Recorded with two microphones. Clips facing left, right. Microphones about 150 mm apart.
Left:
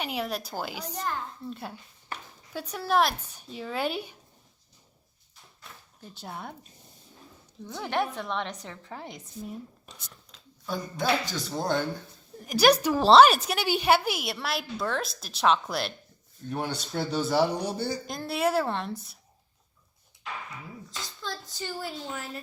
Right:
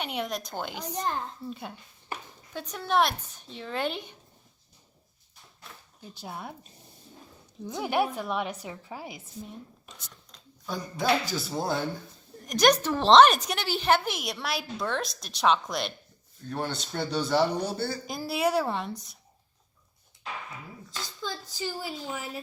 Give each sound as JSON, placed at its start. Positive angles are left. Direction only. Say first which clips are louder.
{"t": 0.0, "sound": "a woman's voice", "louder": "left 1 dB", "side_deg": 0}
{"t": 6.0, "sound": "a woman's voice", "louder": "even", "side_deg": 0}
{"t": 7.7, "sound": "a woman's voice", "louder": "right 2 dB", "side_deg": -10}
{"t": 18.0, "sound": "a woman's voice", "louder": "right 1 dB", "side_deg": 0}
{"t": 20.9, "sound": "a woman's voice", "louder": "right 2 dB", "side_deg": 0}